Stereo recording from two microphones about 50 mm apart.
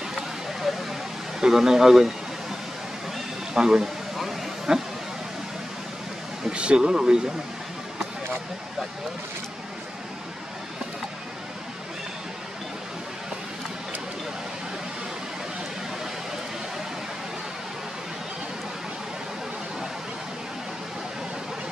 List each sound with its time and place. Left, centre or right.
1.4 s speech: centre
3.5 s speech: centre
4.2 s a sound: centre
6.5 s speech: centre